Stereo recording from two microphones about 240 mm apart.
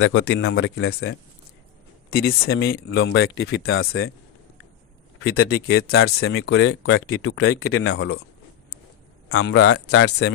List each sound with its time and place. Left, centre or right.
0.0 s speech: left
2.4 s speech: left
5.2 s speech: left
5.7 s speech: left
9.4 s speech: left